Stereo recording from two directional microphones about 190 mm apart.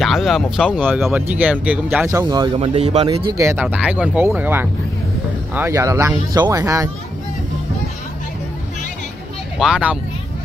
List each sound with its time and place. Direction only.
0.0 s speech: centre (ahead or behind); by 3.3 s 30° right (ahead or behind)
3.3 s speech: 10° right (ahead or behind)
9.6 s speech: 5° right (ahead or behind)